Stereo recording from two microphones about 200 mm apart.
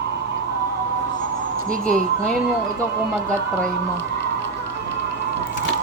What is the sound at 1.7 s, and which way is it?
Speech, 40° right (ahead or behind).